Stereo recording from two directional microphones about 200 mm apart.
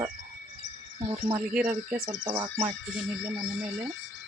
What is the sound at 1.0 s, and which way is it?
Speech, 25° right (ahead or behind).